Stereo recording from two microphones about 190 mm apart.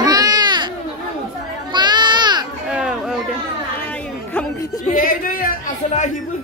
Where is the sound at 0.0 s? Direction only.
20° right (ahead or behind).